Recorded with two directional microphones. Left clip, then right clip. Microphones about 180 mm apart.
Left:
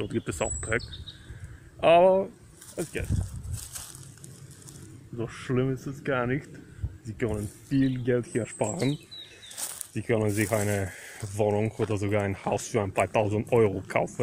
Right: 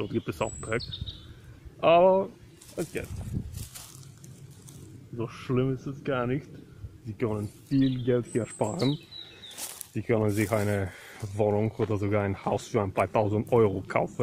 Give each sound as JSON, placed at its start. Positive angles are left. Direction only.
{"t": 0.0, "sound": "speech", "side_deg": 0}
{"t": 1.8, "sound": "speech", "side_deg": 0}
{"t": 5.1, "sound": "speech", "side_deg": 5}
{"t": 7.2, "sound": "speech", "side_deg": -5}
{"t": 9.9, "sound": "speech", "side_deg": -10}